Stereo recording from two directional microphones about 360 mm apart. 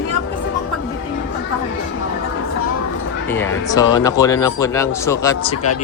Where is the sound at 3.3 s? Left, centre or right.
Centre.